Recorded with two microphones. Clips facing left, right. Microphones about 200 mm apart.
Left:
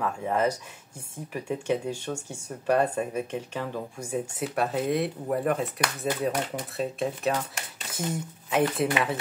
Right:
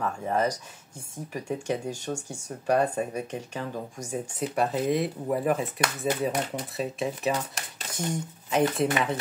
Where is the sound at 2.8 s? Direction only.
5° left (ahead or behind).